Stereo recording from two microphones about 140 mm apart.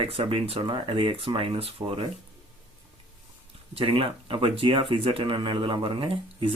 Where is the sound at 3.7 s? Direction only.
40° right (ahead or behind).